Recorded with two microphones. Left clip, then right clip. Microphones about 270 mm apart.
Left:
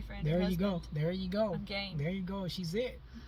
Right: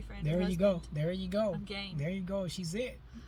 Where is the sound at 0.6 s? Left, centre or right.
Centre.